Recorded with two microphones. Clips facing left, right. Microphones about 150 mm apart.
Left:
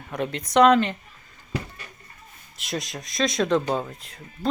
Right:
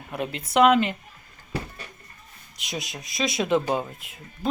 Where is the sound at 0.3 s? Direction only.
5° right (ahead or behind).